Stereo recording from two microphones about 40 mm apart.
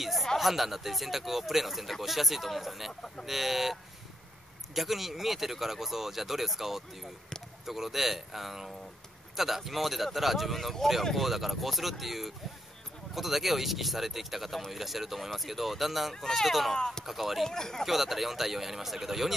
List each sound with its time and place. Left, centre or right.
0.0 s a sound: centre
0.4 s speech: centre
2.9 s speech: centre
3.3 s speech: centre
4.7 s speech: centre
16.7 s speech: centre
17.0 s speech: centre
17.5 s speech: centre
17.8 s speech: centre